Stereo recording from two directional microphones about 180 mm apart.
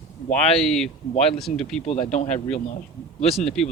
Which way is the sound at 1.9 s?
40° left (ahead or behind).